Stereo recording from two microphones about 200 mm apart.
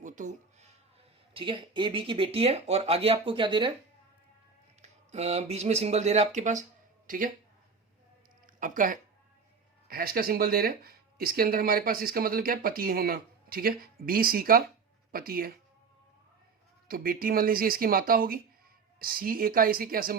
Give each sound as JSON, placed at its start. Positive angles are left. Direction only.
{"t": 0.0, "sound": "a sound", "side_deg": -40}
{"t": 1.3, "sound": "speech", "side_deg": -25}
{"t": 4.8, "sound": "speech", "side_deg": -35}
{"t": 8.4, "sound": "speech", "side_deg": -40}
{"t": 16.9, "sound": "speech", "side_deg": -45}